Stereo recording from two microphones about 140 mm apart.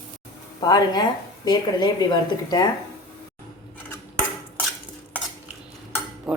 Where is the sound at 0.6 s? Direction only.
30° left (ahead or behind).